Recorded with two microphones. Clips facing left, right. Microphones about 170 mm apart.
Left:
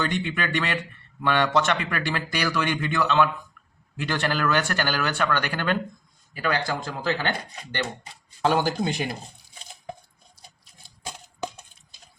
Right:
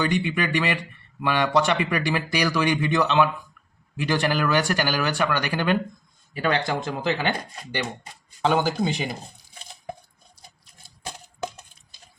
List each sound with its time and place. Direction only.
0.0 s speech: 10° right (ahead or behind)
6.3 s speech: 25° right (ahead or behind)
8.4 s speech: centre (ahead or behind)